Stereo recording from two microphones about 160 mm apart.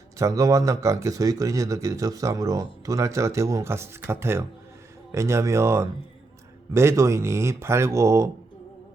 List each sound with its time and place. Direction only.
0.2 s speech: 20° right (ahead or behind)